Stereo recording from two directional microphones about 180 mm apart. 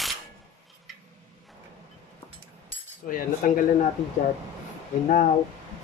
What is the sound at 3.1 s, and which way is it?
Speech, 45° left (ahead or behind).